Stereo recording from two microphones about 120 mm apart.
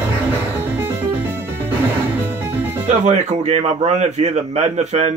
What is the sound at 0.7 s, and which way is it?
Music, 15° right (ahead or behind).